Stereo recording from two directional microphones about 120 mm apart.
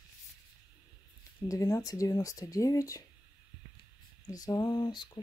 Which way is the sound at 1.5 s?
30° left (ahead or behind).